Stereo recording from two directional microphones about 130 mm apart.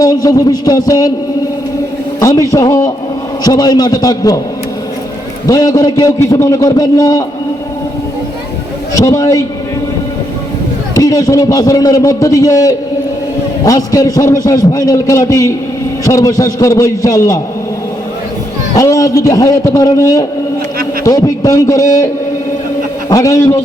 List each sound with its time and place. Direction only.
0.0 s a man's voice: 30° left (ahead or behind)
2.2 s a man's voice: 25° left (ahead or behind)
5.5 s a man's voice: 30° left (ahead or behind)
9.0 s a man's voice: 25° left (ahead or behind)
10.9 s a man's voice: 30° left (ahead or behind)
18.7 s a man's voice: 25° left (ahead or behind)
23.0 s a man's voice: 25° left (ahead or behind)